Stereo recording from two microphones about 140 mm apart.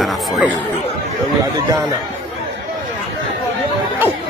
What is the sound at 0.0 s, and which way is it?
Speech, 10° right (ahead or behind).